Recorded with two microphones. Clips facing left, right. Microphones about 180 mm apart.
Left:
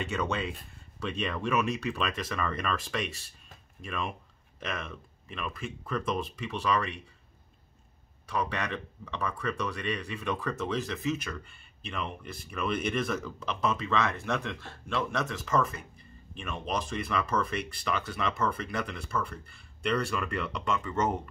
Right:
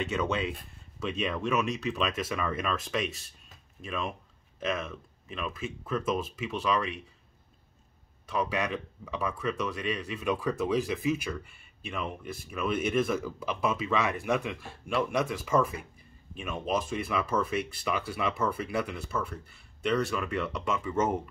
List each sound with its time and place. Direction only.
0.0 s speech: 5° right (ahead or behind)
8.3 s speech: 5° right (ahead or behind)